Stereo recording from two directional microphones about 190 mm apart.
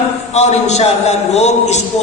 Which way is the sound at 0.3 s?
35° left (ahead or behind).